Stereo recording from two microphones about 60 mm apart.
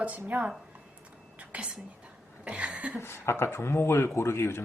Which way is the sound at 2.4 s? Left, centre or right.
Right.